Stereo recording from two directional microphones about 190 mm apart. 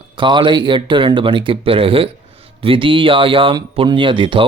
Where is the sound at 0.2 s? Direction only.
25° right (ahead or behind).